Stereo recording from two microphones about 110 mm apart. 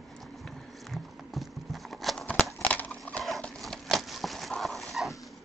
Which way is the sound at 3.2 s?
Centre (ahead or behind).